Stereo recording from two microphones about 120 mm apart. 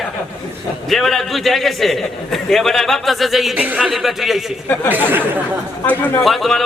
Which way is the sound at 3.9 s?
Centre (ahead or behind).